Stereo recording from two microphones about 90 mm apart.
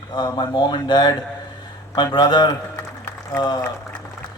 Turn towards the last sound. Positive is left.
turn(degrees=50)  # may be behind; listen again after turning